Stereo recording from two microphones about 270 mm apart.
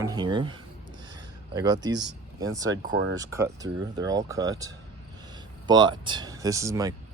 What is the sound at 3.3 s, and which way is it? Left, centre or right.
Speech, centre.